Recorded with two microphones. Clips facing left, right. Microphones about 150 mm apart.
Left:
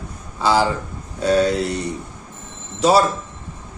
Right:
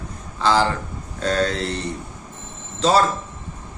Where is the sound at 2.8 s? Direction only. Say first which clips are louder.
Left 3 dB; 10° left (ahead or behind).